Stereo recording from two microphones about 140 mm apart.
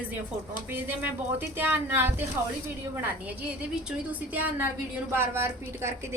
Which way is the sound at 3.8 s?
10° right (ahead or behind).